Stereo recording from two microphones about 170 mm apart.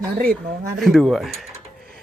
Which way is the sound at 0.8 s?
Centre (ahead or behind).